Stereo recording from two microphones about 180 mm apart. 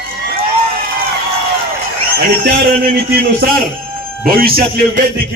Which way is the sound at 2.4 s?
55° right (ahead or behind).